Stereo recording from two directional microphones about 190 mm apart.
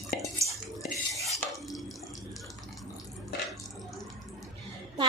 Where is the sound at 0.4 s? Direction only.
15° right (ahead or behind).